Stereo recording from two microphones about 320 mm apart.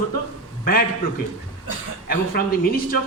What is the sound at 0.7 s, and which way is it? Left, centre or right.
Speech, left.